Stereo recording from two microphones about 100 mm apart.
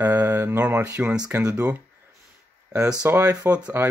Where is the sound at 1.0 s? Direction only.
10° right (ahead or behind).